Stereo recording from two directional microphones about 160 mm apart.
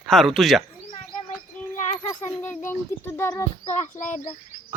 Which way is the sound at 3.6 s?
45° left (ahead or behind).